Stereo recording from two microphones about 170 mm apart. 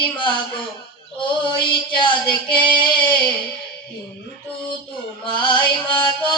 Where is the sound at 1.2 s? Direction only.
30° left (ahead or behind).